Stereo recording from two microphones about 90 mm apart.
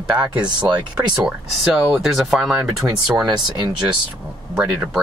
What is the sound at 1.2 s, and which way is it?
Speech, centre (ahead or behind).